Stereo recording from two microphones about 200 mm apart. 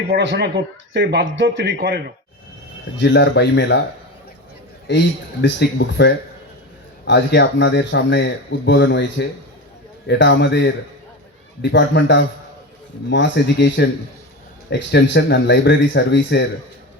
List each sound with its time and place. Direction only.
0.1 s a man's voice: 60° right (ahead or behind)
3.0 s speech: 60° left (ahead or behind)
4.9 s speech: 60° left (ahead or behind)